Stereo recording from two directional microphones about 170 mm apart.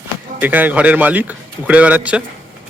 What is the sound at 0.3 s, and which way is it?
Speech, 10° right (ahead or behind).